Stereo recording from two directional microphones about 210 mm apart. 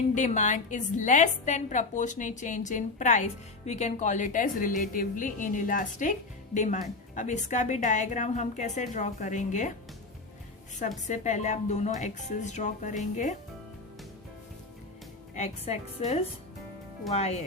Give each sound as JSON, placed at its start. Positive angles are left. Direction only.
{"t": 0.1, "sound": "a woman's voice", "side_deg": 35}
{"t": 10.8, "sound": "a woman's voice", "side_deg": 35}
{"t": 15.4, "sound": "a woman's voice", "side_deg": 30}